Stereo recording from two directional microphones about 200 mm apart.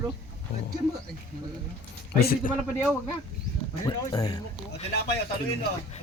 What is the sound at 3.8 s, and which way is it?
Speech, 20° left (ahead or behind).